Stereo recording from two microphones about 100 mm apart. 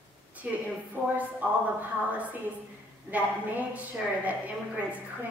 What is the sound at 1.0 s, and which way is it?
Speech, 15° right (ahead or behind).